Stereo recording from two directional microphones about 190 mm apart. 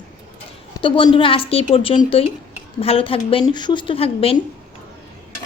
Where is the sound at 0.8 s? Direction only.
25° left (ahead or behind).